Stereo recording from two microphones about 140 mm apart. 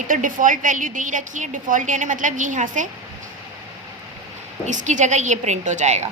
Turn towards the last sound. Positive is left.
turn(degrees=-55)  # may be behind; listen again after turning